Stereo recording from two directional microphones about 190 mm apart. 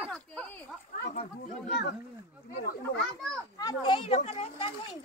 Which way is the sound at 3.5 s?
25° left (ahead or behind).